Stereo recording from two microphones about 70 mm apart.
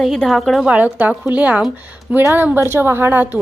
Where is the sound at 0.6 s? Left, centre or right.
Right.